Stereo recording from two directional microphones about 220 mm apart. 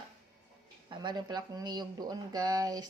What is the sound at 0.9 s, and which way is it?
Speech, 20° right (ahead or behind).